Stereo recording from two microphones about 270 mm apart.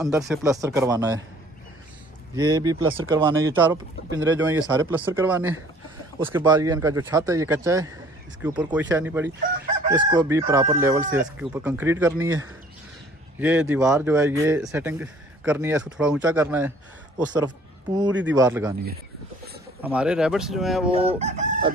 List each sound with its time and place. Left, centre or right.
0.0 s speech: centre
0.5 s chicken: centre
2.3 s chicken: centre
13.4 s speech: centre
14.4 s chicken: centre
18.2 s chicken: centre
19.8 s speech: centre
20.9 s chicken: right